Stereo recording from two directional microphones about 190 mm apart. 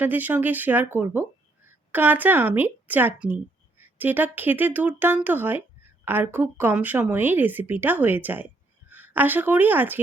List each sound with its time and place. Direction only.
0.0 s a woman's voice: 10° right (ahead or behind)